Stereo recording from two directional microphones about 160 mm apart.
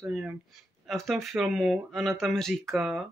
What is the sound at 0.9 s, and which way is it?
Speech, centre (ahead or behind).